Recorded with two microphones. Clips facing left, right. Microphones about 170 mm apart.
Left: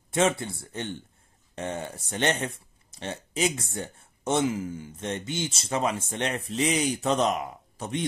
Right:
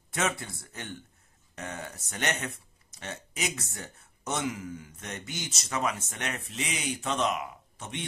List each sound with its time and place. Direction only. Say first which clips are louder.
0.1 s speech: left 7 dB; 25° left (ahead or behind)